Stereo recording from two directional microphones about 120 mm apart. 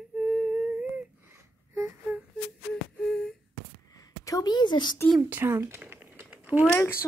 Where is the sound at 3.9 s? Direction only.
30° left (ahead or behind).